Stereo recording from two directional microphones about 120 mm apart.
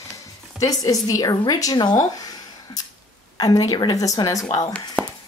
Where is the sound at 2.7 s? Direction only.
35° left (ahead or behind).